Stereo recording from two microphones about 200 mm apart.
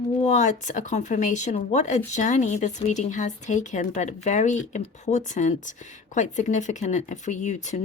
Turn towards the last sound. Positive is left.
turn(degrees=35)  # may be behind; listen again after turning